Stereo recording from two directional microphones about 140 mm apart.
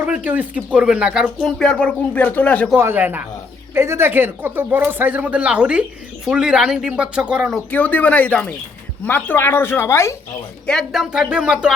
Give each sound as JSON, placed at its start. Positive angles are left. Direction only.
{"t": 0.0, "sound": "speech", "side_deg": -10}
{"t": 2.7, "sound": "speech", "side_deg": -15}
{"t": 7.7, "sound": "speech", "side_deg": 10}
{"t": 10.7, "sound": "speech", "side_deg": 0}